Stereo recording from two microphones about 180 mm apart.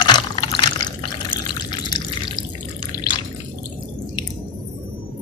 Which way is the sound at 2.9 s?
20° left (ahead or behind).